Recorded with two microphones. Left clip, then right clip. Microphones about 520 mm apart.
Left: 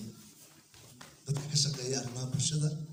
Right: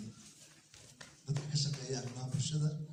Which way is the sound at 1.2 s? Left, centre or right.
Centre.